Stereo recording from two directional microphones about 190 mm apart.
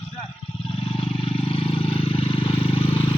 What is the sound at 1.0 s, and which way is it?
Vehicle, 30° left (ahead or behind).